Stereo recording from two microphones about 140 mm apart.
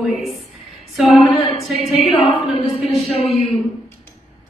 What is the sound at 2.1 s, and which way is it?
Speech, 45° left (ahead or behind).